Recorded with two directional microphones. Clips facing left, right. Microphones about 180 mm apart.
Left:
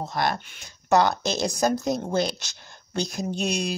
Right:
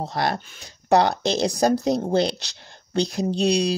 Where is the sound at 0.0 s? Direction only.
35° right (ahead or behind).